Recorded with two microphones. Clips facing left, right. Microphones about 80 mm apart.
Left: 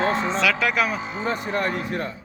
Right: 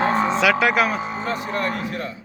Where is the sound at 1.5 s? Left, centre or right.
Left.